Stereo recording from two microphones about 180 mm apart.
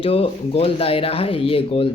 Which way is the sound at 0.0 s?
35° left (ahead or behind).